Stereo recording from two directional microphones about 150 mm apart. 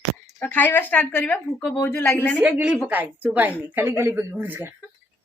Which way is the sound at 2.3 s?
5° right (ahead or behind).